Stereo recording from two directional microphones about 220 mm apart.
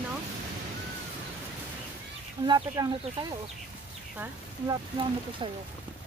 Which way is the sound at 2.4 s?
20° right (ahead or behind).